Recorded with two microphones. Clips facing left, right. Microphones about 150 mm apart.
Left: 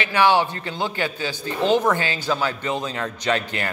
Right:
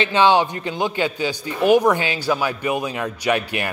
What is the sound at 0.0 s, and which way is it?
A man's voice, 20° right (ahead or behind).